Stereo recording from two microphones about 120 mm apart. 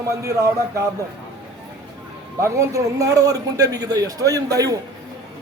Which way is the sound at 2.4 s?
25° right (ahead or behind).